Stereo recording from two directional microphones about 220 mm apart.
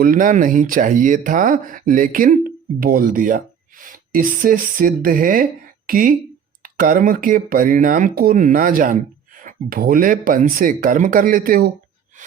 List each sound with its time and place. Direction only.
0.0 s speech: 40° right (ahead or behind)